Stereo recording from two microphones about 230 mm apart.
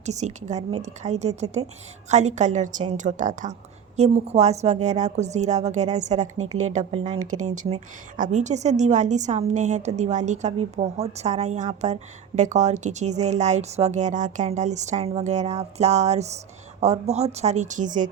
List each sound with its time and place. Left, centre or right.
0.0 s a woman's voice: right
7.2 s speech: right
7.5 s a woman's voice: right